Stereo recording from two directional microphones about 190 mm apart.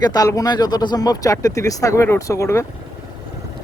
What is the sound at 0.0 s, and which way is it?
Speech, 20° left (ahead or behind).